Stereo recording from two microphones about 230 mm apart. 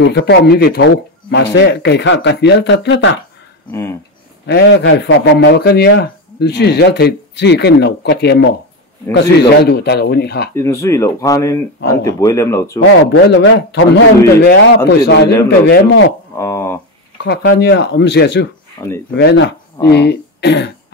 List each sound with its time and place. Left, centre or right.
0.0 s a man's voice: left
4.5 s a man's voice: left
9.6 s a man's voice: left
10.5 s speech: centre
13.1 s a man's voice: left
16.3 s speech: centre
17.2 s a man's voice: left
18.8 s speech: centre
19.1 s a man's voice: left